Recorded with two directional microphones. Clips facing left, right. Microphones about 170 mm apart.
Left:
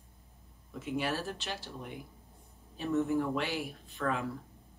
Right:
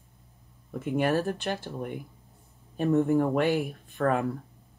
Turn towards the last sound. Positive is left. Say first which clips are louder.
# right 8 dB
turn(degrees=-55)  # may be behind; listen again after turning